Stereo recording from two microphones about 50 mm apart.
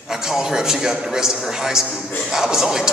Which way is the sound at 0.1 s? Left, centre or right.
Centre.